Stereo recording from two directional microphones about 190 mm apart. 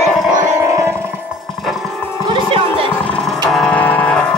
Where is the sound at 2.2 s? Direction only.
30° right (ahead or behind).